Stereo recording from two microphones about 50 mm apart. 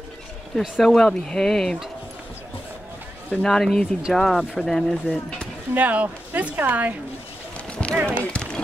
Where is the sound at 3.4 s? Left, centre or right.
Centre.